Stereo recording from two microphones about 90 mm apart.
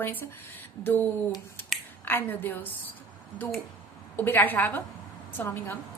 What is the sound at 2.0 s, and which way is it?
Speech, 20° left (ahead or behind).